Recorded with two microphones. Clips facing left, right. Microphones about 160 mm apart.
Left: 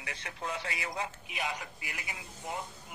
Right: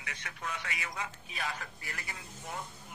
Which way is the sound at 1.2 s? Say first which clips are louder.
Left 2 dB; 15° left (ahead or behind).